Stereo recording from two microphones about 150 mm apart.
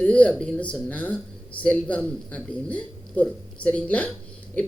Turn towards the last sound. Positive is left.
turn(degrees=10)  # may be behind; listen again after turning